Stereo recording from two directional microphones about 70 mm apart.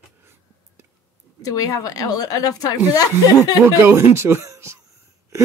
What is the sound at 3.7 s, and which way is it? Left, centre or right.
Speech, right.